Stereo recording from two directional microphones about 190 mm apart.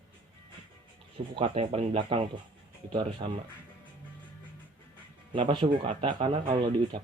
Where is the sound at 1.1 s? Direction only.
30° right (ahead or behind).